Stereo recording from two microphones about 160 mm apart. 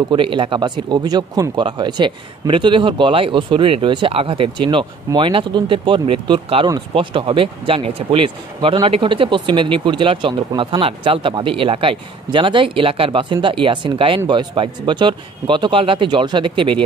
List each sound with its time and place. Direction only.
0.1 s speech: 30° right (ahead or behind)